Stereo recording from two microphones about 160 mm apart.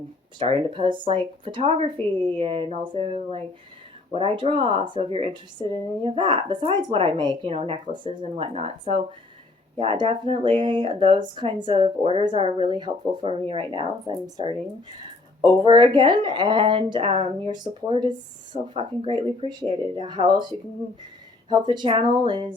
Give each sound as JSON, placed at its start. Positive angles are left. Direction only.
{"t": 0.3, "sound": "speech", "side_deg": -35}
{"t": 15.6, "sound": "speech", "side_deg": -30}
{"t": 21.5, "sound": "speech", "side_deg": -25}